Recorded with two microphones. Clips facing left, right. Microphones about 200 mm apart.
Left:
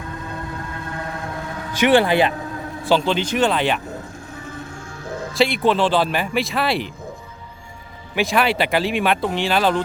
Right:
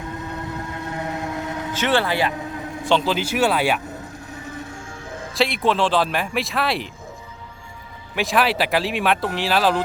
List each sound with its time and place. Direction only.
0.9 s vehicle: 20° right (ahead or behind)
1.7 s speech: 15° left (ahead or behind)
2.8 s speech: centre (ahead or behind)
5.3 s speech: centre (ahead or behind)
8.1 s speech: centre (ahead or behind)